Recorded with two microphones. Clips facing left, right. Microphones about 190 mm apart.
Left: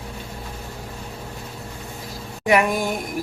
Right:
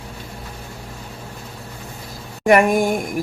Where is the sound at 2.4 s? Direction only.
50° right (ahead or behind).